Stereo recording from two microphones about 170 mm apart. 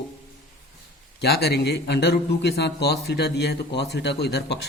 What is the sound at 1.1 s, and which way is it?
A man's voice, 70° left (ahead or behind).